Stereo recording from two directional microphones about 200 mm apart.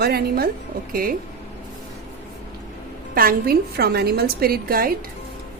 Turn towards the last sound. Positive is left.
turn(degrees=-50)  # may be behind; listen again after turning